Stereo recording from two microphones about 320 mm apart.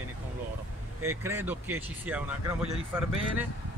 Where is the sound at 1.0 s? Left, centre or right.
Centre.